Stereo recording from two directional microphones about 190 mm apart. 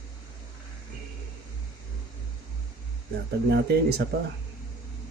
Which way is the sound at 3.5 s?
60° right (ahead or behind).